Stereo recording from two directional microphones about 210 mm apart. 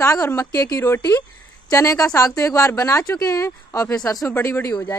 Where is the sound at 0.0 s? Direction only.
15° left (ahead or behind).